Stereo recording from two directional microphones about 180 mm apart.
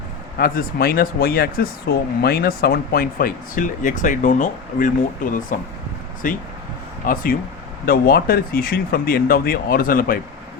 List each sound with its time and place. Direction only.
0.3 s speech: 55° left (ahead or behind)